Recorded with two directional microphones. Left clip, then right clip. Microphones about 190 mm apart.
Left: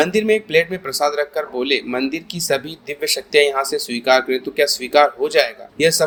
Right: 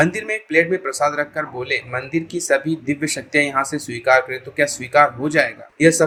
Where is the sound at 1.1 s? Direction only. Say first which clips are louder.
Left 1 dB; 30° left (ahead or behind).